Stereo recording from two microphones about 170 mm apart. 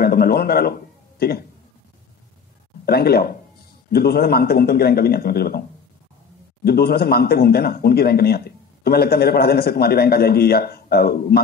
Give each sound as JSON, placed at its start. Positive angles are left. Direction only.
{"t": 0.0, "sound": "a man's voice", "side_deg": 65}
{"t": 2.8, "sound": "a man's voice", "side_deg": 65}
{"t": 6.6, "sound": "a man's voice", "side_deg": 65}